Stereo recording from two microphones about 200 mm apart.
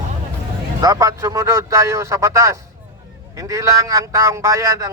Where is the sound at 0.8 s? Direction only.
15° right (ahead or behind).